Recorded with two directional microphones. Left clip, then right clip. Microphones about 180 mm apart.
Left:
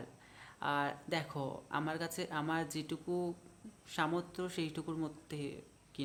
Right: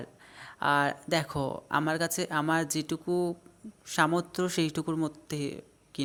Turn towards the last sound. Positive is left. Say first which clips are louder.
# right 9 dB
turn(degrees=-35)  # may be behind; listen again after turning